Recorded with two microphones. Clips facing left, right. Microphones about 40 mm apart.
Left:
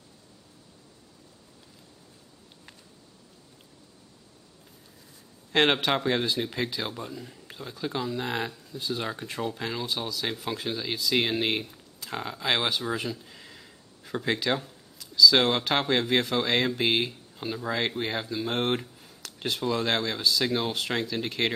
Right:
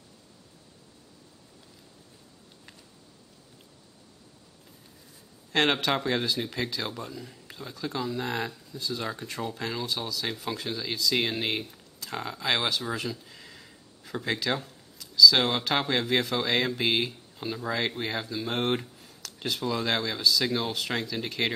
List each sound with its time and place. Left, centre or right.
5.5 s speech: centre
8.7 s speech: left
9.0 s speech: centre